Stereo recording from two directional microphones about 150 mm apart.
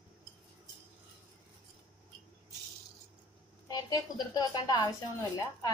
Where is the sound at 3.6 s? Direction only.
25° left (ahead or behind).